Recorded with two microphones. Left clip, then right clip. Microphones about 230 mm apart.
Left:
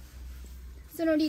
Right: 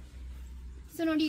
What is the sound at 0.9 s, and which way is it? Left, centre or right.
Speech, centre.